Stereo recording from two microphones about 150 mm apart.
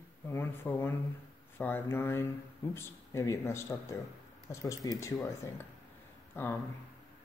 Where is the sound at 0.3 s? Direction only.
15° left (ahead or behind).